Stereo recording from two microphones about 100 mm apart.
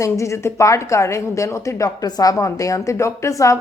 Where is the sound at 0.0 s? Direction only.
30° left (ahead or behind).